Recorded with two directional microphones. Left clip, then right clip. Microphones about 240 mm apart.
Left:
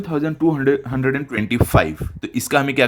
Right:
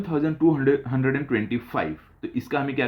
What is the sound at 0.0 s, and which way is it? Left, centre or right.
Speech, left.